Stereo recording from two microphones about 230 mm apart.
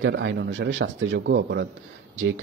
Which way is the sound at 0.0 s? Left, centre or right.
Right.